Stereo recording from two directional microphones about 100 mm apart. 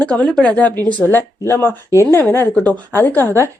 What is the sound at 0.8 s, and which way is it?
A woman's voice, 20° left (ahead or behind).